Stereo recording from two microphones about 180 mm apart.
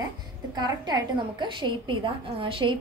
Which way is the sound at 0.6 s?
25° right (ahead or behind).